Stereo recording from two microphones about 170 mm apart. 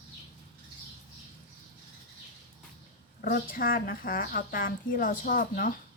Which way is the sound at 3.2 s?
60° left (ahead or behind).